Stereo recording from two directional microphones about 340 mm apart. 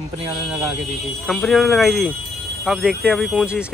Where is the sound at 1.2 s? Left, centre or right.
Centre.